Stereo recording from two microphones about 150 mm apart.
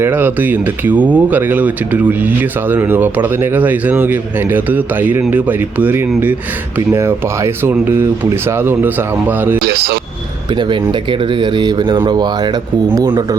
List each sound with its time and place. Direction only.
0.0 s speech: 15° right (ahead or behind)
9.6 s speech: 90° right
10.5 s speech: 30° right (ahead or behind)